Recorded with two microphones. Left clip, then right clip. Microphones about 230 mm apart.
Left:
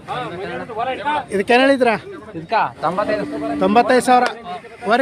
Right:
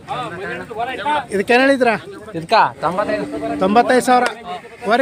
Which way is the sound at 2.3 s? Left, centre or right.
Right.